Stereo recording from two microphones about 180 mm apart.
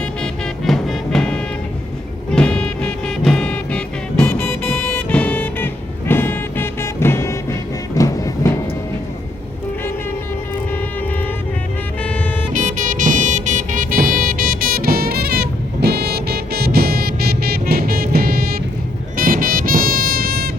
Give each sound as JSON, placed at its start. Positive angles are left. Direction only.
{"t": 0.0, "sound": "music", "side_deg": 5}
{"t": 12.5, "sound": "music", "side_deg": -45}